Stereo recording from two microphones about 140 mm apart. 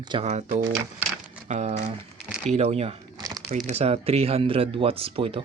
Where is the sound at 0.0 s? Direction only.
35° right (ahead or behind).